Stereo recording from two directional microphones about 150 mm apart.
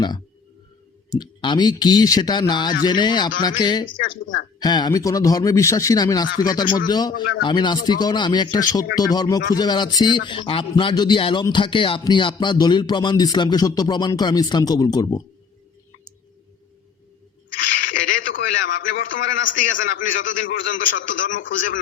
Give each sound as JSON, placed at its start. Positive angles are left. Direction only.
{"t": 1.1, "sound": "a man's voice", "side_deg": 30}
{"t": 17.7, "sound": "a man's voice", "side_deg": 65}